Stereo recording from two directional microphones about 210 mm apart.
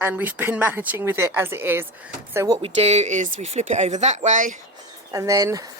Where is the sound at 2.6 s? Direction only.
30° right (ahead or behind).